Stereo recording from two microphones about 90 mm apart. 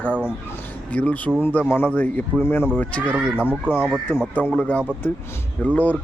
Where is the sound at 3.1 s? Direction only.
15° right (ahead or behind).